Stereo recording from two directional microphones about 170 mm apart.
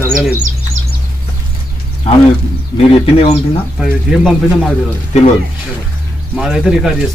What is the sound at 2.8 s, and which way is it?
Speech, 35° left (ahead or behind).